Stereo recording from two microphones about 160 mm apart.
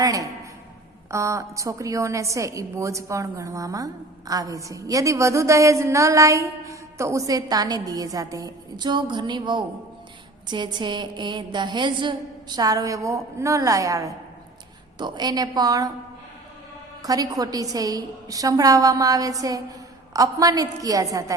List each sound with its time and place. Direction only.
0.0 s a woman's voice: 20° right (ahead or behind)
17.0 s a woman's voice: 25° right (ahead or behind)